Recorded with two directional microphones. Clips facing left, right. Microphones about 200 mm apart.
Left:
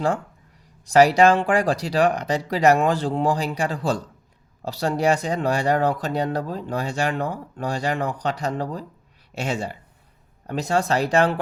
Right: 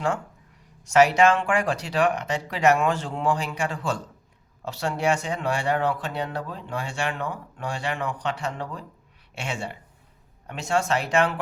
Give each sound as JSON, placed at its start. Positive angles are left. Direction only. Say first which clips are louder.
{"t": 0.9, "sound": "speech", "louder": "left 3 dB", "side_deg": 35}